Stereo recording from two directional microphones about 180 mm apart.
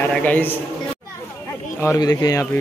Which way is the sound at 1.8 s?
20° left (ahead or behind).